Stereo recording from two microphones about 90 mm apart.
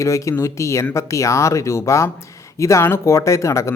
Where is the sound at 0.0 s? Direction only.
35° left (ahead or behind).